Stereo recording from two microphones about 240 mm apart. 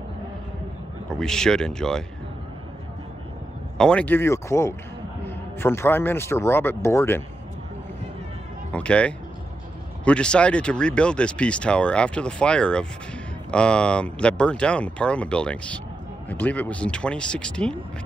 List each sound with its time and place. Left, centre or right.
1.0 s speech: centre
3.7 s a man's voice: centre
8.7 s speech: centre